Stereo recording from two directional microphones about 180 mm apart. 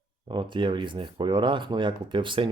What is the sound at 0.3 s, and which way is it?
Speech, 25° right (ahead or behind).